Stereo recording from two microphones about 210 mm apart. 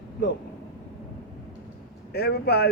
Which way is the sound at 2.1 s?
50° left (ahead or behind).